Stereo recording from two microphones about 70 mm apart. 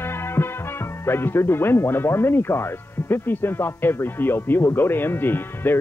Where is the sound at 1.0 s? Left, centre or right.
Left.